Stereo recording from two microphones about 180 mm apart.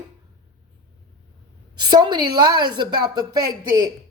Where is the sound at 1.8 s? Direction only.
25° right (ahead or behind).